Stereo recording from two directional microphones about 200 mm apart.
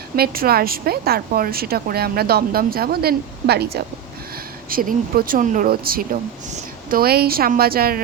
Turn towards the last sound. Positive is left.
turn(degrees=-50)  # may be behind; listen again after turning